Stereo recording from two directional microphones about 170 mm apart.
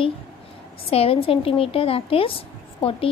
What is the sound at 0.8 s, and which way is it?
A woman's voice, 35° left (ahead or behind).